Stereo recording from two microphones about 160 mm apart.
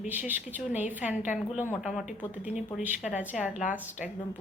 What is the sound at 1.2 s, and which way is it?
Speech, 50° left (ahead or behind).